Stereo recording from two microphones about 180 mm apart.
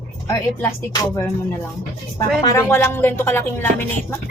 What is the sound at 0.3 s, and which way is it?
Speech, 20° left (ahead or behind).